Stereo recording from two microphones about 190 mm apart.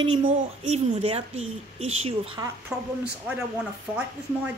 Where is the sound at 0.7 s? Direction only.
35° right (ahead or behind).